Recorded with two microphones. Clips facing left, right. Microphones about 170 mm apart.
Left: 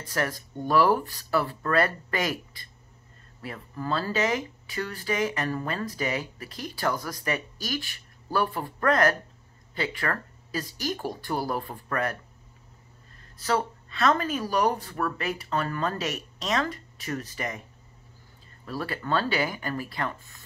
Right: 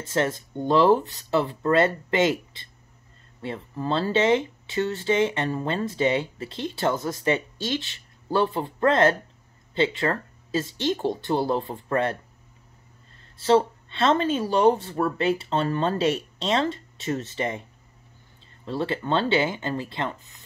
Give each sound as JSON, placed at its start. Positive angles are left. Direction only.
{"t": 0.0, "sound": "speech", "side_deg": -25}
{"t": 13.4, "sound": "speech", "side_deg": -25}
{"t": 18.7, "sound": "speech", "side_deg": -25}